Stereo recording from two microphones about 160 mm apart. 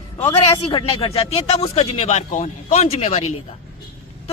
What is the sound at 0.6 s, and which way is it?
Speech, 35° left (ahead or behind).